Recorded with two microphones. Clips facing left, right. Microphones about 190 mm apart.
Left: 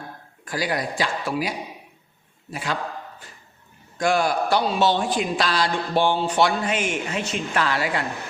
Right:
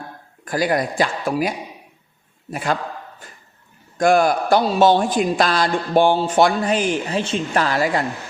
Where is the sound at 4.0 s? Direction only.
50° right (ahead or behind).